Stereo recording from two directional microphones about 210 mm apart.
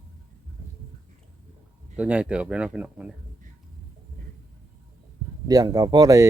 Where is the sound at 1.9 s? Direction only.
5° right (ahead or behind).